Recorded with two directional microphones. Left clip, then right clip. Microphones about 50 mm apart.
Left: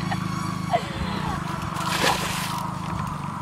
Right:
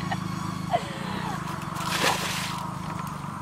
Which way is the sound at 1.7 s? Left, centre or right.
Centre.